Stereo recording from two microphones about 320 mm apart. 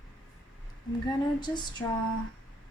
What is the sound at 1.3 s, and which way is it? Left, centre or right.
Speech, centre.